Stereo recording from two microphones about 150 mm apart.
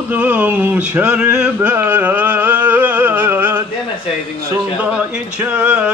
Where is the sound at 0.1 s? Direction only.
10° right (ahead or behind).